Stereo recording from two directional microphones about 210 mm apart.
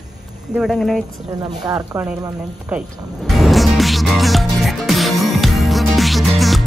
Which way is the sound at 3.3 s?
Centre (ahead or behind).